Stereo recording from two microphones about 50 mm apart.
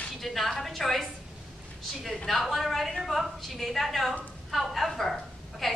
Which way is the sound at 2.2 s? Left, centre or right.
Centre.